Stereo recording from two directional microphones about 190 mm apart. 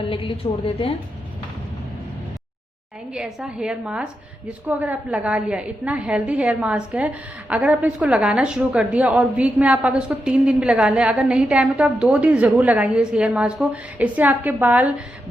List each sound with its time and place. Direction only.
0.1 s a woman's voice: 25° left (ahead or behind)
3.1 s a woman's voice: 5° right (ahead or behind)